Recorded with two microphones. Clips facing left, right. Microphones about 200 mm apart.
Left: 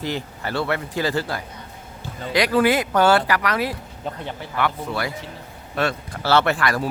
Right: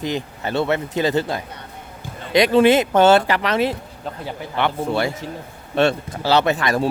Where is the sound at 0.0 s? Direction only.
20° right (ahead or behind).